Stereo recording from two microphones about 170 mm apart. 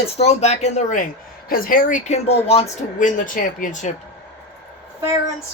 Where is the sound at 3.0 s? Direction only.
50° left (ahead or behind).